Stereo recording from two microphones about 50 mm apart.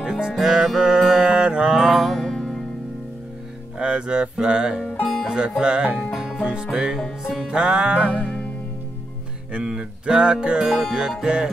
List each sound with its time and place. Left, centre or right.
0.0 s music: centre
0.7 s mantra: centre
1.9 s music: centre
2.2 s music: centre
3.7 s speech: centre
5.0 s music: centre
5.6 s music: centre
8.1 s music: left
9.5 s music: centre
10.9 s music: centre